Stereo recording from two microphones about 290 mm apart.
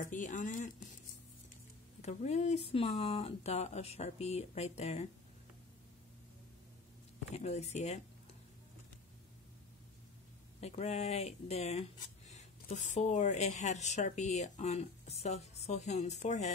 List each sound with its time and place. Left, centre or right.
0.0 s speech: left
2.0 s speech: left
7.3 s speech: left
10.6 s speech: left